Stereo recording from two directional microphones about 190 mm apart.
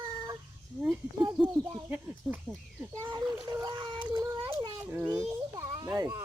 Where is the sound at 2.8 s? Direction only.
15° right (ahead or behind).